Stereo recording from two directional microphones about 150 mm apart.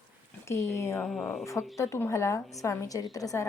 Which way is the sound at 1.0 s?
5° left (ahead or behind).